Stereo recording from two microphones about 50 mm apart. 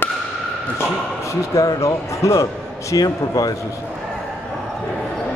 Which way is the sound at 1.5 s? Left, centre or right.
Left.